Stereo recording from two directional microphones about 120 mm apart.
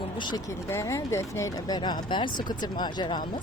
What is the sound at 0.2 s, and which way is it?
Speech, 35° left (ahead or behind).